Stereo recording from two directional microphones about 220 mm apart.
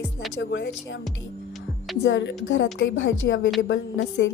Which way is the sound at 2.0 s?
55° left (ahead or behind).